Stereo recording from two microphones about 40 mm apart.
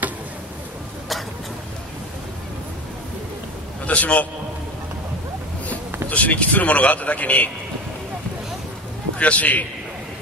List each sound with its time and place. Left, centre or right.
3.8 s a man's voice: left
6.0 s speech: left
9.2 s speech: left